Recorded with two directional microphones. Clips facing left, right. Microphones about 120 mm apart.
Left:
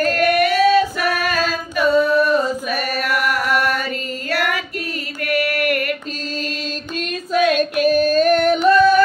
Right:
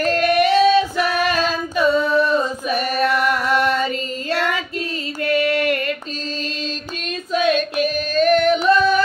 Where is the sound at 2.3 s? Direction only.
25° right (ahead or behind).